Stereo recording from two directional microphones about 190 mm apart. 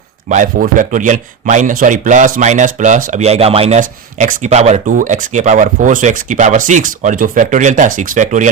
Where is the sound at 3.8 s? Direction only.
40° right (ahead or behind).